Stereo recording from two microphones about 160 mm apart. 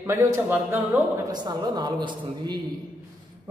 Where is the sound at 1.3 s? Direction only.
25° right (ahead or behind).